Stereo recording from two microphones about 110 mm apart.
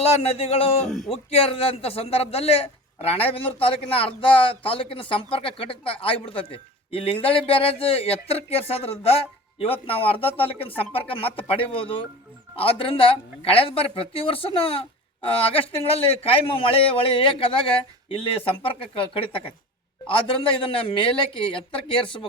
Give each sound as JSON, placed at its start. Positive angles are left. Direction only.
{"t": 0.0, "sound": "a man's voice", "side_deg": 65}
{"t": 0.9, "sound": "speech", "side_deg": 0}
{"t": 1.1, "sound": "a man's voice", "side_deg": 60}
{"t": 20.6, "sound": "speech", "side_deg": 55}